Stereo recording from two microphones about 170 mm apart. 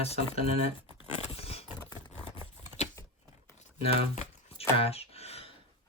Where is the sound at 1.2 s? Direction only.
35° left (ahead or behind).